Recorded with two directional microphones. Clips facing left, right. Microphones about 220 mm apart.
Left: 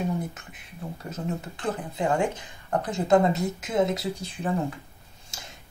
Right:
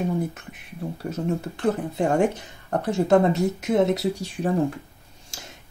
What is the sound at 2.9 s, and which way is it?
Speech, 70° right (ahead or behind).